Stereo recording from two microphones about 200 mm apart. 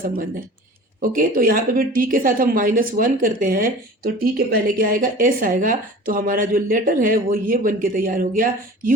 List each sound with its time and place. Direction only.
1.0 s a woman's voice: 45° right (ahead or behind)